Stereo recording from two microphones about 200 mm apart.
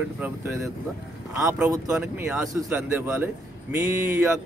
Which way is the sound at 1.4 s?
5° right (ahead or behind).